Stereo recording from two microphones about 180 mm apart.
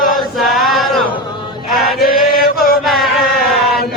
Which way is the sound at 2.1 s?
55° left (ahead or behind).